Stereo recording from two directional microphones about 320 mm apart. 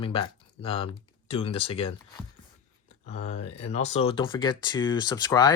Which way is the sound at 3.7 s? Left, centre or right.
Centre.